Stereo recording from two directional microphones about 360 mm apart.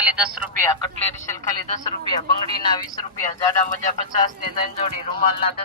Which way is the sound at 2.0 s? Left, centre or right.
Centre.